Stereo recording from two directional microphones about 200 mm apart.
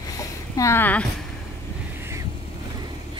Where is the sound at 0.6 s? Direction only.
10° left (ahead or behind).